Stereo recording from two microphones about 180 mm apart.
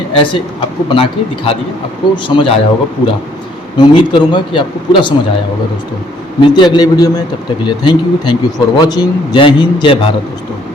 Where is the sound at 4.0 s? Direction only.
30° left (ahead or behind).